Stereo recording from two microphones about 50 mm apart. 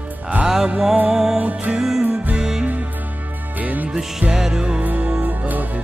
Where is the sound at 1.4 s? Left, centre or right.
Right.